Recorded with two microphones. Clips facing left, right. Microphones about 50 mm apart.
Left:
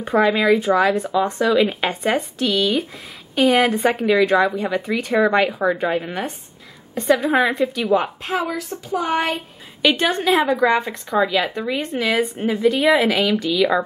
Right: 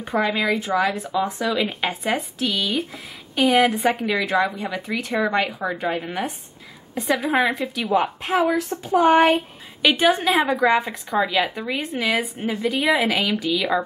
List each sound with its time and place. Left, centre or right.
0.0 s speech: centre
7.0 s speech: centre
8.2 s a woman's voice: centre
8.9 s a sound: right
9.8 s speech: centre